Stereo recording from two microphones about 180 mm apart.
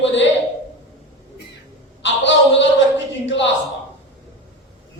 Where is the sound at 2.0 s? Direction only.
90° left.